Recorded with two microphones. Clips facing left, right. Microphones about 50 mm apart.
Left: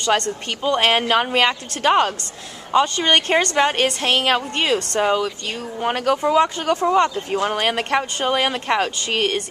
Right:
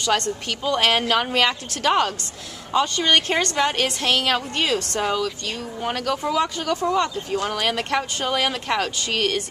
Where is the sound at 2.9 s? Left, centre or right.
Left.